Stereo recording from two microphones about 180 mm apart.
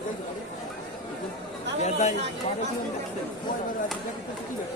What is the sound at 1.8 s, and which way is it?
Speech, 40° left (ahead or behind).